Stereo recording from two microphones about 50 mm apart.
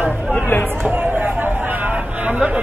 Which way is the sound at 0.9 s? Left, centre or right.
Right.